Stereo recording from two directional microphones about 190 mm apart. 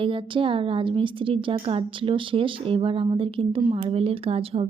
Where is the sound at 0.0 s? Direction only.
25° right (ahead or behind).